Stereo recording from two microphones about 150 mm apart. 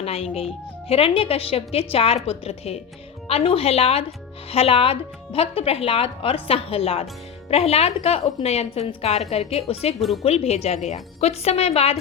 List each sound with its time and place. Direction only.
0.0 s a woman's voice: 40° left (ahead or behind)